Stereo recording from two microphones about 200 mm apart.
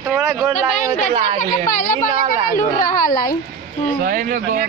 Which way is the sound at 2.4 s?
45° left (ahead or behind).